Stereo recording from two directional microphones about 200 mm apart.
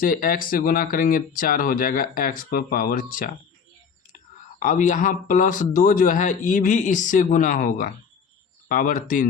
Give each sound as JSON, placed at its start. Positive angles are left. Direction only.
{"t": 0.0, "sound": "speech", "side_deg": 45}
{"t": 4.6, "sound": "speech", "side_deg": 40}